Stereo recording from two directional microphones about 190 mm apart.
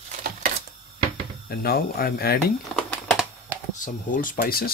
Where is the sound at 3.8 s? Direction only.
45° left (ahead or behind).